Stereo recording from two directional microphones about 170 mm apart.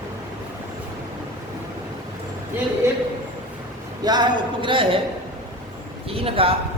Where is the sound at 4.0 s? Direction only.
25° right (ahead or behind).